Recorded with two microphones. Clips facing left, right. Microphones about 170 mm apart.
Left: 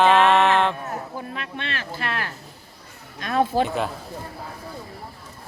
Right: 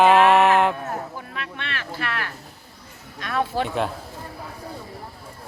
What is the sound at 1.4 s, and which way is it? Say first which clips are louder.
Speech: left 1 dB; 30° left (ahead or behind).